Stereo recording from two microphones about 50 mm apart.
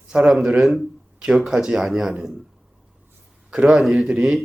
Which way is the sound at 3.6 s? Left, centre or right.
Centre.